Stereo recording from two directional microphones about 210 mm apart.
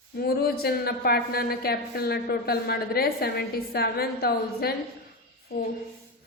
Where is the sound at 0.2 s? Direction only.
50° left (ahead or behind).